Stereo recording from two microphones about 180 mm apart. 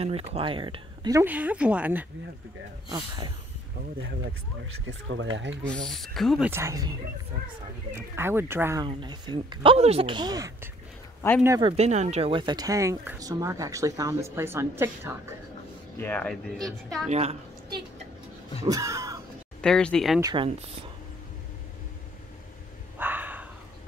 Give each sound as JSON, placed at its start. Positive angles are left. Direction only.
{"t": 0.0, "sound": "speech", "side_deg": -35}
{"t": 1.2, "sound": "speech", "side_deg": -10}
{"t": 2.9, "sound": "speech", "side_deg": -25}
{"t": 4.8, "sound": "speech", "side_deg": -90}
{"t": 5.9, "sound": "speech", "side_deg": 0}
{"t": 6.5, "sound": "speech", "side_deg": -15}
{"t": 8.8, "sound": "speech", "side_deg": -25}
{"t": 11.6, "sound": "speech", "side_deg": -35}
{"t": 16.0, "sound": "speech", "side_deg": 10}
{"t": 17.1, "sound": "a woman's voice", "side_deg": -35}
{"t": 18.6, "sound": "a sound", "side_deg": -20}
{"t": 19.6, "sound": "speech", "side_deg": 5}
{"t": 20.2, "sound": "speech", "side_deg": -20}
{"t": 22.9, "sound": "a sound", "side_deg": -10}